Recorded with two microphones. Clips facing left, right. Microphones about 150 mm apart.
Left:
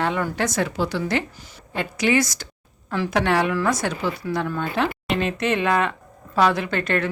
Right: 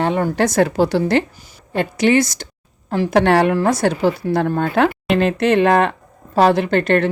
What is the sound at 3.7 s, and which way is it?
Speech, 35° right (ahead or behind).